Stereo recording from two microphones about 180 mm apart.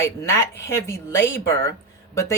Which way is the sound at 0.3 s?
15° left (ahead or behind).